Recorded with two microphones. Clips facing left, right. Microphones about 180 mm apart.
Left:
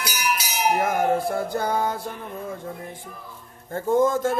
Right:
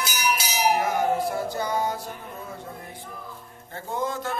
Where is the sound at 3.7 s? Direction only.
45° left (ahead or behind).